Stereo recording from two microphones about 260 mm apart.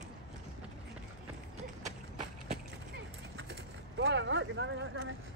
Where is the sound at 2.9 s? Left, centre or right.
Right.